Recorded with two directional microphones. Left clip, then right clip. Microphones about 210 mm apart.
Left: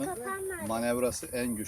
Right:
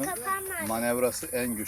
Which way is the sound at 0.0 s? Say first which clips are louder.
Right 4 dB; 30° left (ahead or behind).